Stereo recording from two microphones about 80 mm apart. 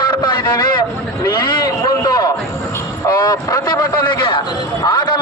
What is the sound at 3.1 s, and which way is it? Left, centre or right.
Speech, left.